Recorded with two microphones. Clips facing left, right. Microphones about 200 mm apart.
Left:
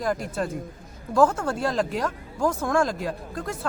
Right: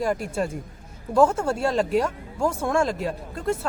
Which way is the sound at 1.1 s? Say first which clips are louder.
Right 1 dB; 25° right (ahead or behind).